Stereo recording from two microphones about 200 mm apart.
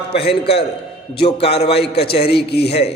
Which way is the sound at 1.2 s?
30° left (ahead or behind).